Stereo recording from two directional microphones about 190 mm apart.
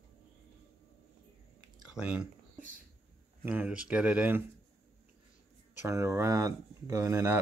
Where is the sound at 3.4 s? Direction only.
10° right (ahead or behind).